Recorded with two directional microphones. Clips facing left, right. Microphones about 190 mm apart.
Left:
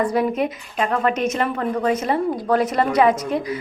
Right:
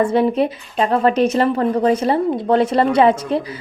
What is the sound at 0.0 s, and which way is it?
A woman's voice, 25° right (ahead or behind).